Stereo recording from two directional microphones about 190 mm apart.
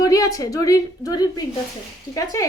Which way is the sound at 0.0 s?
20° left (ahead or behind).